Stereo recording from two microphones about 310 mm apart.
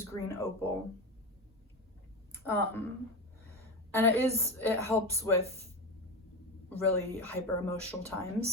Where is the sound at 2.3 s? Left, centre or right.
Centre.